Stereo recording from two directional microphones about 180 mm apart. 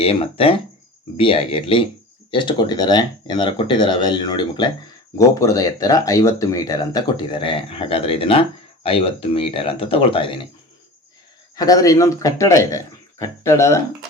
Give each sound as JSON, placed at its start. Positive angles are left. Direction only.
{"t": 0.0, "sound": "speech", "side_deg": 30}
{"t": 11.5, "sound": "a man's voice", "side_deg": 20}